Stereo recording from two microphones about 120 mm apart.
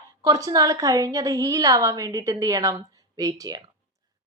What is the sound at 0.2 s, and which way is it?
A woman's voice, 30° right (ahead or behind).